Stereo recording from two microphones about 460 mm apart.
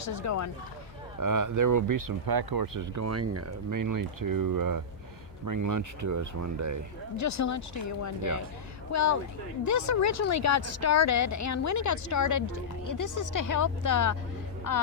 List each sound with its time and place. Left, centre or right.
0.0 s speech: left
1.2 s speech: right
7.2 s a woman's voice: left